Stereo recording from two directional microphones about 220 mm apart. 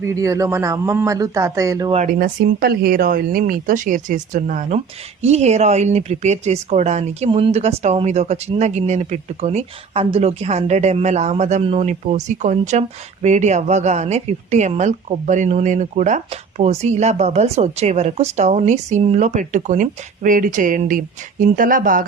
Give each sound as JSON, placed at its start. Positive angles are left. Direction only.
{"t": 0.0, "sound": "speech", "side_deg": -15}
{"t": 2.1, "sound": "a woman's voice", "side_deg": -40}